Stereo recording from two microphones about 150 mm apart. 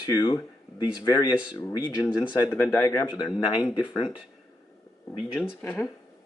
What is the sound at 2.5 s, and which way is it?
Speech, 15° left (ahead or behind).